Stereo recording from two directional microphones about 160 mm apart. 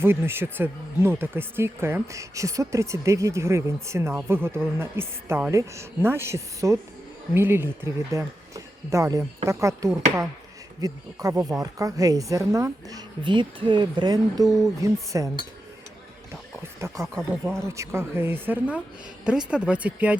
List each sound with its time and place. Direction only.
0.0 s a woman's voice: 15° right (ahead or behind)
13.2 s a woman's voice: 30° right (ahead or behind)
16.8 s speech: 20° right (ahead or behind)